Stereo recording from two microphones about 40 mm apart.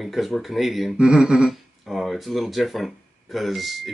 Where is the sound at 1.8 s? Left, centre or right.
Centre.